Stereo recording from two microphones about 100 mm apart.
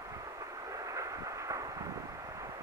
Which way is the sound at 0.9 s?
35° right (ahead or behind).